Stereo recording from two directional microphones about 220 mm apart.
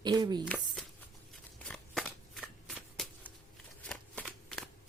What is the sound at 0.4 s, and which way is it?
Speech, 5° left (ahead or behind).